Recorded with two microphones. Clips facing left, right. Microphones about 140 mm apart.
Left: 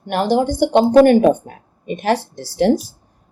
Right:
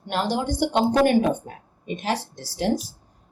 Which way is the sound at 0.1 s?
60° left (ahead or behind).